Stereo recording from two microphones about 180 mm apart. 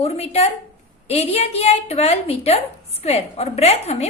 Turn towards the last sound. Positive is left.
turn(degrees=35)  # may be behind; listen again after turning